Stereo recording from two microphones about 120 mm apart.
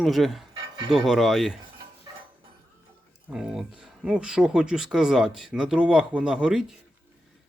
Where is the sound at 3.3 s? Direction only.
5° right (ahead or behind).